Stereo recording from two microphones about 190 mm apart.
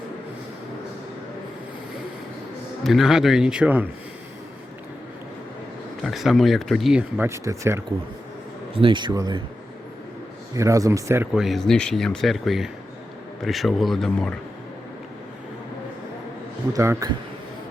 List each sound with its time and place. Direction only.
2.8 s speech: centre (ahead or behind)
6.0 s speech: centre (ahead or behind)
8.7 s speech: 25° right (ahead or behind)
10.5 s speech: 15° right (ahead or behind); by 14.3 s 5° left (ahead or behind)
16.7 s speech: 15° right (ahead or behind)